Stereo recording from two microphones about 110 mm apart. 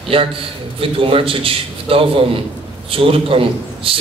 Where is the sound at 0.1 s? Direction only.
55° right (ahead or behind).